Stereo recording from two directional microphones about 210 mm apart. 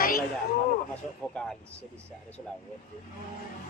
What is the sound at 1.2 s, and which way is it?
Speech, 5° left (ahead or behind).